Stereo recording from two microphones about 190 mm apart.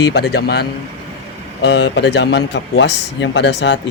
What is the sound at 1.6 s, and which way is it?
A man's voice, 65° left (ahead or behind).